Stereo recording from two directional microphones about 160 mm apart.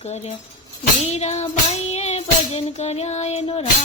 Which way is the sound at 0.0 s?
40° left (ahead or behind).